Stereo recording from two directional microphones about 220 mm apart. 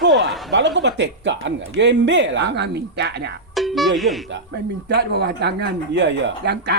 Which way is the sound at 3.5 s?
Centre (ahead or behind).